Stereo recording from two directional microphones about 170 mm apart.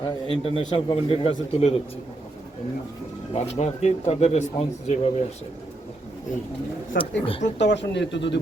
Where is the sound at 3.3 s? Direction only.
40° left (ahead or behind).